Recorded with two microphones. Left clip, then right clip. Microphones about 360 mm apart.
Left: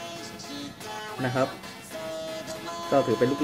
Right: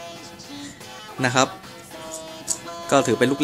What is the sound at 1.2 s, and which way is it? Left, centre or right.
Speech, right.